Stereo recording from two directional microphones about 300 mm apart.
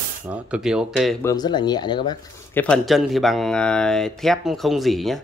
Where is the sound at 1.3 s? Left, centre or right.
Centre.